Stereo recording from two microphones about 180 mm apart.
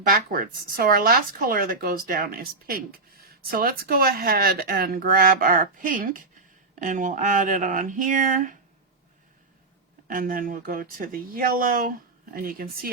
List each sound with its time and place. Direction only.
0.1 s speech: 55° right (ahead or behind)
10.1 s speech: 50° right (ahead or behind)